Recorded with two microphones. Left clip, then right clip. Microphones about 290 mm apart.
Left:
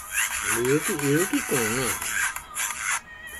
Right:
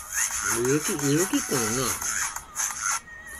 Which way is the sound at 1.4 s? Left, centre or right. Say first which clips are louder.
Left 1 dB; right.